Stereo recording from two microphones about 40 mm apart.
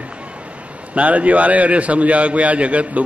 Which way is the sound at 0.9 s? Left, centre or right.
Right.